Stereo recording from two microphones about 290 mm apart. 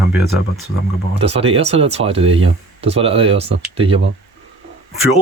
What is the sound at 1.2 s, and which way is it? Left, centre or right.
Speech, right.